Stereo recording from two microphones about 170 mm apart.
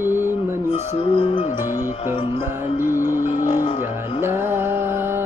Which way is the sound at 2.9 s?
50° left (ahead or behind).